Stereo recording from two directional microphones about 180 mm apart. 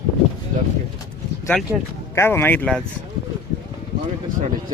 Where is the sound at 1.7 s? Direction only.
5° right (ahead or behind).